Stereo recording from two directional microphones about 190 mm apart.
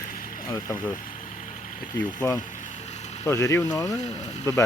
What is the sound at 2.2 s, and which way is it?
Speech, 15° left (ahead or behind).